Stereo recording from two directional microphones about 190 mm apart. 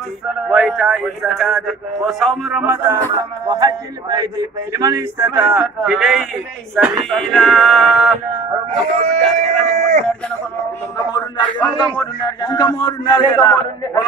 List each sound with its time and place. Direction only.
0.5 s speech: centre (ahead or behind)
2.6 s speech: 10° right (ahead or behind)
3.4 s a sound: 20° right (ahead or behind)
4.7 s speech: 20° right (ahead or behind); by 8.1 s centre (ahead or behind)
9.0 s speech: 35° right (ahead or behind)
11.1 s a man's voice: 25° left (ahead or behind)